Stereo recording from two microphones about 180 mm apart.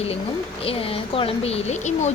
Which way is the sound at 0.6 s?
30° left (ahead or behind).